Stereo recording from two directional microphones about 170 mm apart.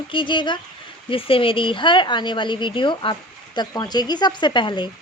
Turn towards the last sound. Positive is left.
turn(degrees=25)  # may be behind; listen again after turning